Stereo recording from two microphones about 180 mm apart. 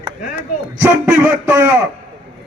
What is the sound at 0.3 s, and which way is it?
A man's voice, 10° right (ahead or behind).